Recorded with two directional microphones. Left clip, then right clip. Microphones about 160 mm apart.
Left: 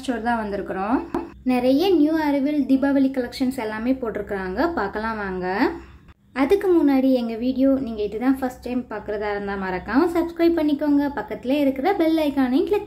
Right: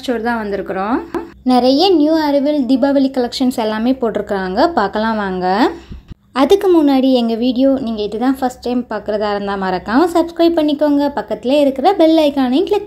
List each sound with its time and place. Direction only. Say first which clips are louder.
0.1 s a woman's voice: right 6 dB; 20° right (ahead or behind)
1.5 s a woman's voice: right 8 dB; 30° right (ahead or behind)